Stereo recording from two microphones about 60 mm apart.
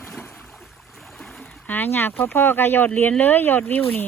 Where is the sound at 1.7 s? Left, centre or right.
Left.